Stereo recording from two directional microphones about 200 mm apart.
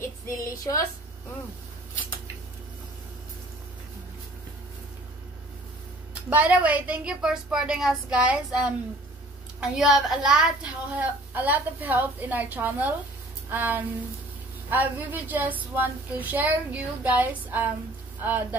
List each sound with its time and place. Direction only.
0.4 s speech: 15° left (ahead or behind)
6.3 s a woman's voice: 5° right (ahead or behind)